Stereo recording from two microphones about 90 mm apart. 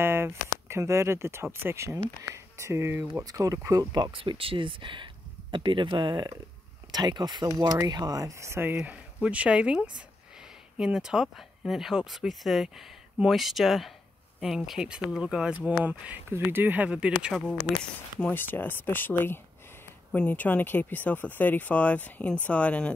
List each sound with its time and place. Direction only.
0.0 s speech: 25° right (ahead or behind)
3.3 s speech: 40° right (ahead or behind)
4.1 s speech: 75° right (ahead or behind); by 17.3 s 10° right (ahead or behind)
18.3 s speech: 20° left (ahead or behind)